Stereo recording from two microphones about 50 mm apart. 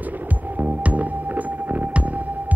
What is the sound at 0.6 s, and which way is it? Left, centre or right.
Music, right.